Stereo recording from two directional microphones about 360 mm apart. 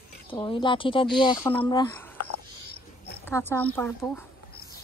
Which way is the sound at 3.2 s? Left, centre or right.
Centre.